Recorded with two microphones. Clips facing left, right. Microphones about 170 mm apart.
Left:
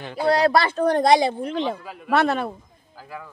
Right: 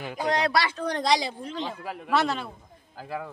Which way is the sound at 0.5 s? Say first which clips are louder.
Left 7 dB; 50° left (ahead or behind).